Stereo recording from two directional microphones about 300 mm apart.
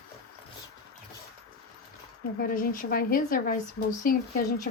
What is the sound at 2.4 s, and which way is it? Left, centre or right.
Speech, left.